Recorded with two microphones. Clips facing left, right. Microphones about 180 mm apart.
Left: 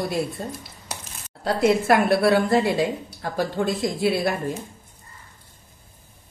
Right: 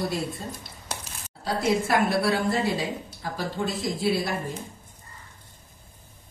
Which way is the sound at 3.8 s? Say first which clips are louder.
Left 1 dB; 60° left (ahead or behind).